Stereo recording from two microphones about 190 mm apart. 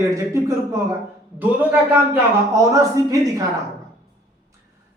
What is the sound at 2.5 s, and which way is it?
Speech, 15° right (ahead or behind).